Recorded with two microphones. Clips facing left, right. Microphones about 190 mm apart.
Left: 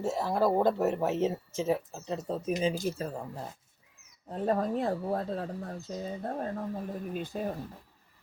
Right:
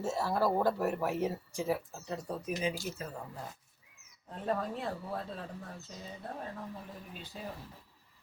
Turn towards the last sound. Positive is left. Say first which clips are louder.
# left 10 dB
turn(degrees=50)  # may be behind; listen again after turning